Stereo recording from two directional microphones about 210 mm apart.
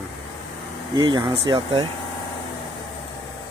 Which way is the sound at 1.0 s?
20° right (ahead or behind).